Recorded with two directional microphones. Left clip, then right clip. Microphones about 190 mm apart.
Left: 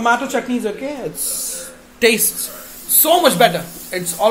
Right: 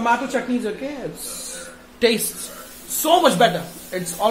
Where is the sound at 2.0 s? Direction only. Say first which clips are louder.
Left 4 dB; centre (ahead or behind).